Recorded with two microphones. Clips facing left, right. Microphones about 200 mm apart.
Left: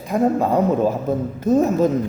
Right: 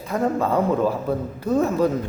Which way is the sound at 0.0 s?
15° left (ahead or behind).